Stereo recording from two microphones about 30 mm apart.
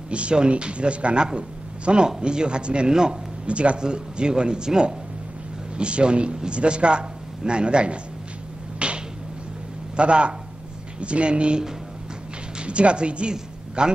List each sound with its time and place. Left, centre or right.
0.1 s speech: right
3.4 s speech: right
3.8 s speech: right
8.7 s finger snapping: right
9.9 s speech: right